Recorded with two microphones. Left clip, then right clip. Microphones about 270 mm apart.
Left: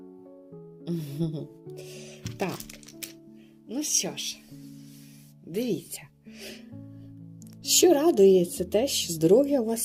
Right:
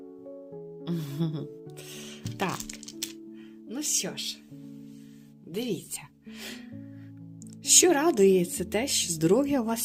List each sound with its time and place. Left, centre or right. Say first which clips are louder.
0.9 s music: left 2 dB; right
3.7 s speech: left 3 dB; centre
5.5 s speech: left 3 dB; centre
7.8 s a woman's voice: left 3 dB; centre